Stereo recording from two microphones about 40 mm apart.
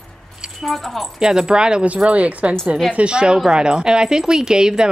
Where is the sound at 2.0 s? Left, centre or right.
Right.